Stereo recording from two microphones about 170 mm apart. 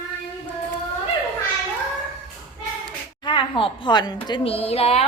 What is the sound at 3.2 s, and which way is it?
A woman's voice, 30° left (ahead or behind).